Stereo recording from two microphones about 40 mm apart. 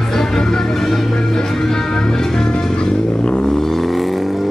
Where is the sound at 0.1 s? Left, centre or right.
Centre.